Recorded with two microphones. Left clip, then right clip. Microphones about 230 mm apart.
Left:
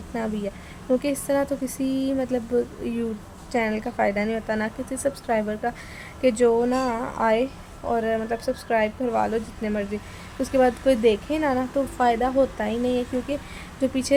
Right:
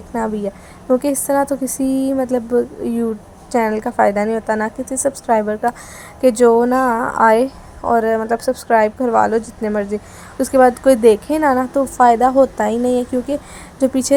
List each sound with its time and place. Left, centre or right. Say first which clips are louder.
0.1 s a woman's voice: right 8 dB; centre